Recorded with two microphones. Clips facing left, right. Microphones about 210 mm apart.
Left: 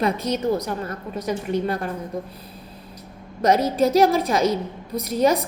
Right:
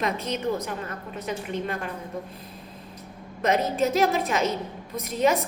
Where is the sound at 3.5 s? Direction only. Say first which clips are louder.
Left 5 dB; 35° left (ahead or behind).